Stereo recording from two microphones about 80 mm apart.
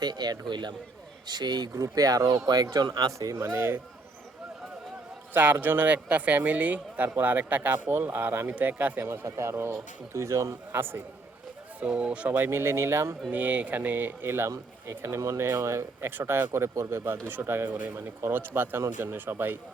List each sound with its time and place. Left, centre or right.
0.0 s a man's voice: right
1.7 s a man's voice: right
3.1 s speech: right
5.3 s speech: right
11.8 s speech: centre; by 13.1 s right
13.3 s speech: right